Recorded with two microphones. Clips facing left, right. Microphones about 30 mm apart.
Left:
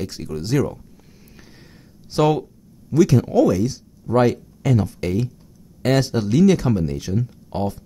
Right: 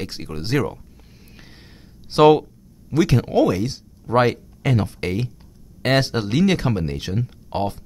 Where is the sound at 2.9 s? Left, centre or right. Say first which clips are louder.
Left 2 dB; right.